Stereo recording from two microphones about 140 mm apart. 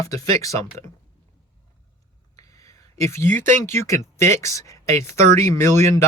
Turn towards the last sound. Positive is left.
turn(degrees=20)  # may be behind; listen again after turning